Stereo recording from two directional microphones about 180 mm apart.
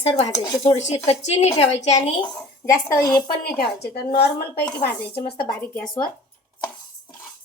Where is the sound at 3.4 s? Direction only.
60° left (ahead or behind).